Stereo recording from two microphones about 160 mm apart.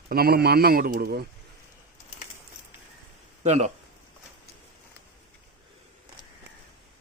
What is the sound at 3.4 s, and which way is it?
Speech, 45° right (ahead or behind).